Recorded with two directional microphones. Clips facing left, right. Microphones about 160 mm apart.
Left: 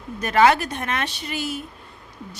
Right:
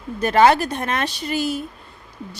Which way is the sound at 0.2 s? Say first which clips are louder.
Right 2 dB; 30° right (ahead or behind).